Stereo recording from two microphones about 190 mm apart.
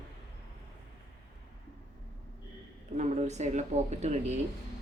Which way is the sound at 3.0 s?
35° right (ahead or behind).